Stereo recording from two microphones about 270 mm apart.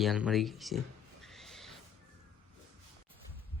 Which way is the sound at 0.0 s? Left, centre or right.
Centre.